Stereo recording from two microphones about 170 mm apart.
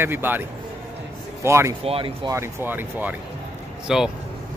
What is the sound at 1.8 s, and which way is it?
Speech, 35° right (ahead or behind).